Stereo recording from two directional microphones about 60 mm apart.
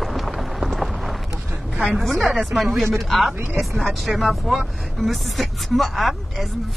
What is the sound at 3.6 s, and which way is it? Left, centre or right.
Speech, centre.